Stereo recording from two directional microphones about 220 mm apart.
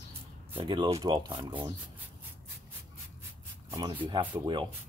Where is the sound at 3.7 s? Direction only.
20° right (ahead or behind).